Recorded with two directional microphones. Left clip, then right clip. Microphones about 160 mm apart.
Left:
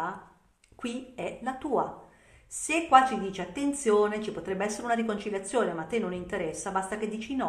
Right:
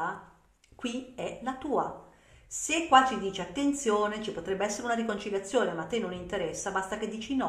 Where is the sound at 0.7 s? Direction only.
25° left (ahead or behind).